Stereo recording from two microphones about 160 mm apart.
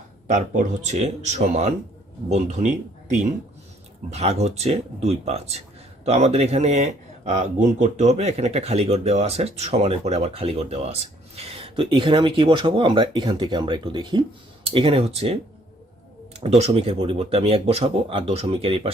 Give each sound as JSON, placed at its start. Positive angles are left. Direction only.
{"t": 0.3, "sound": "speech", "side_deg": -50}
{"t": 16.6, "sound": "speech", "side_deg": -40}